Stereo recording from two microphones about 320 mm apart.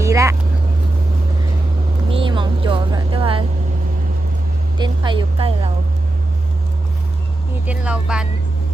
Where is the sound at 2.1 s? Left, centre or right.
Centre.